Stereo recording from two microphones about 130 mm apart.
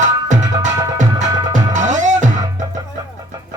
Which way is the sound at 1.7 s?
70° right (ahead or behind).